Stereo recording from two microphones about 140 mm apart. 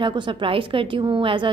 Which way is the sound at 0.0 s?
35° right (ahead or behind).